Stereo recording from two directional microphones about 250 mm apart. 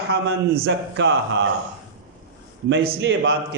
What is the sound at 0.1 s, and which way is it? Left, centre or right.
A man's voice, right.